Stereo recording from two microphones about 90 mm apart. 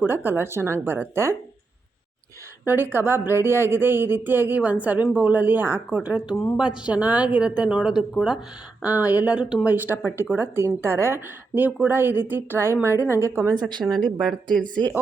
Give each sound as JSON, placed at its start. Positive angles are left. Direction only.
{"t": 0.0, "sound": "a woman's voice", "side_deg": -20}
{"t": 2.6, "sound": "a woman's voice", "side_deg": -25}
{"t": 9.7, "sound": "a woman's voice", "side_deg": -20}
{"t": 14.0, "sound": "speech", "side_deg": 0}
{"t": 14.5, "sound": "speech", "side_deg": 15}